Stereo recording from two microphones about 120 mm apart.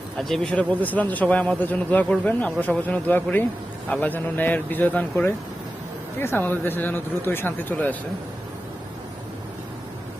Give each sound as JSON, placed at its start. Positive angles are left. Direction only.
{"t": 0.2, "sound": "a man's voice", "side_deg": 5}
{"t": 6.1, "sound": "a man's voice", "side_deg": 20}